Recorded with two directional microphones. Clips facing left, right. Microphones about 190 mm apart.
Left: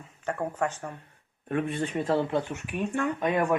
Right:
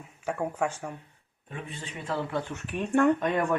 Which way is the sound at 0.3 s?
10° right (ahead or behind).